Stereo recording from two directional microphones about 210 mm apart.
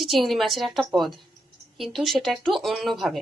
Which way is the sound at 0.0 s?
Centre (ahead or behind).